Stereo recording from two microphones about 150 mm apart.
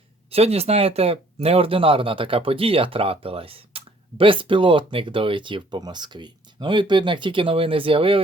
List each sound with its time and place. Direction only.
0.3 s speech: 40° right (ahead or behind)